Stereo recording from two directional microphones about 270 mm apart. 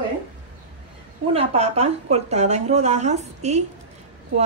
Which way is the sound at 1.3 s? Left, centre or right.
Right.